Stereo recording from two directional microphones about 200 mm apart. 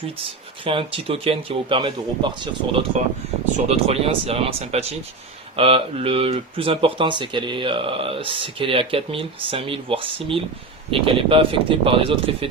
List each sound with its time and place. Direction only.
0.6 s speech: 25° right (ahead or behind)